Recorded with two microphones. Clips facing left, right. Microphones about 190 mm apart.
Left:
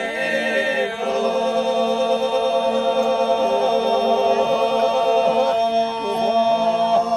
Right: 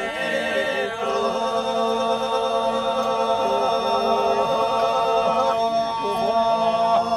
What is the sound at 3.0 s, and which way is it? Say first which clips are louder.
Chant: left 4 dB; 30° left (ahead or behind).